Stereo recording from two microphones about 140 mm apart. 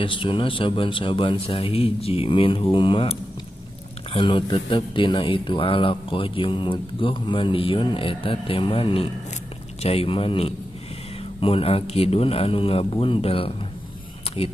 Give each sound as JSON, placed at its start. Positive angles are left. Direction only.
{"t": 0.0, "sound": "a man's voice", "side_deg": 35}